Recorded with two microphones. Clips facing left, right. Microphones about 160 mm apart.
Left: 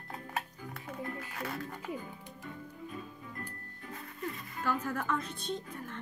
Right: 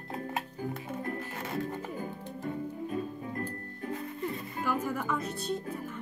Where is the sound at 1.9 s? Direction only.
45° right (ahead or behind).